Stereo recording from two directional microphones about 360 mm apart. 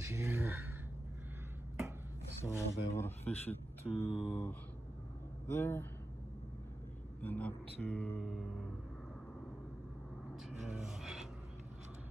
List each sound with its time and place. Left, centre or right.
0.0 s speech: centre
2.4 s speech: centre
7.2 s a man's voice: centre
10.5 s a sound: centre